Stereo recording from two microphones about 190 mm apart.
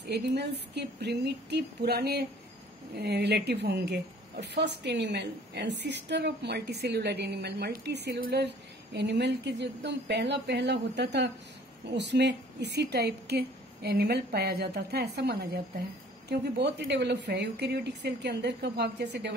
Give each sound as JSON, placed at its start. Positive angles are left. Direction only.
{"t": 0.0, "sound": "a woman's voice", "side_deg": -60}